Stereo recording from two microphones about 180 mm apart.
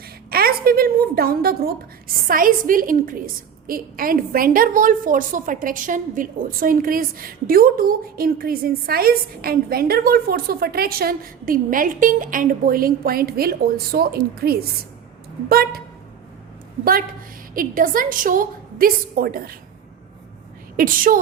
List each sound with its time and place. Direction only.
0.3 s a sound: 55° right (ahead or behind)
2.2 s a woman's voice: 50° right (ahead or behind)
17.5 s a woman's voice: 50° right (ahead or behind)
20.7 s a woman's voice: 50° right (ahead or behind)